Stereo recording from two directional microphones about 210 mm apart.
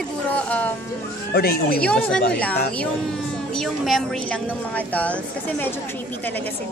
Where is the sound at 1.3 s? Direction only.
45° left (ahead or behind).